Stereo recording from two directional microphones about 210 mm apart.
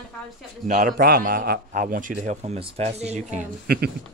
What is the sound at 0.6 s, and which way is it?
Speech, 35° right (ahead or behind).